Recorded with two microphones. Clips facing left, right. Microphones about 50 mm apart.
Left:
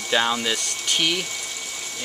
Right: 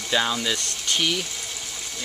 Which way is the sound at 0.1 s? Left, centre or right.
Centre.